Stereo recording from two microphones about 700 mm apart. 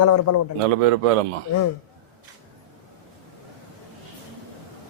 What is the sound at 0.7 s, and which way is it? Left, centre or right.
Speech, right.